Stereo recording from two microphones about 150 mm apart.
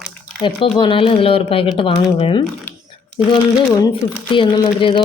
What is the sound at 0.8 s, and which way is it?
Speech, 35° left (ahead or behind).